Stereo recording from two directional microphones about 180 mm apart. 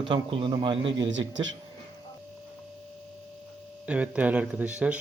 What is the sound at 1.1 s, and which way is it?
Speech, 90° right.